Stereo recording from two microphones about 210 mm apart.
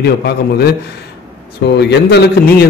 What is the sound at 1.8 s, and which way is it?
Speech, 50° left (ahead or behind).